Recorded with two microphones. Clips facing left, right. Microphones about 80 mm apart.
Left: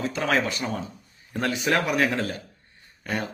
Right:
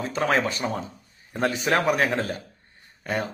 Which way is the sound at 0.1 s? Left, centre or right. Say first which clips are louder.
Right 5 dB; right.